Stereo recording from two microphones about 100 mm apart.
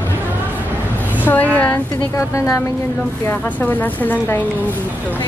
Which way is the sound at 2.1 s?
30° left (ahead or behind).